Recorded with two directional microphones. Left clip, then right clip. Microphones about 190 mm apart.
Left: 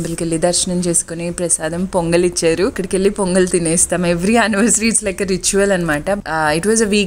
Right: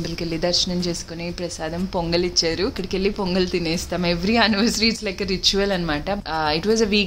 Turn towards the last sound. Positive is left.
turn(degrees=35)  # may be behind; listen again after turning